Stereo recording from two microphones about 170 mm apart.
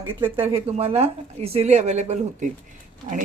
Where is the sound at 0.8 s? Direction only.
40° right (ahead or behind).